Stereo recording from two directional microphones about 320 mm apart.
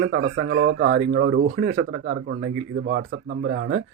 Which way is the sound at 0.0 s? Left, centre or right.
Right.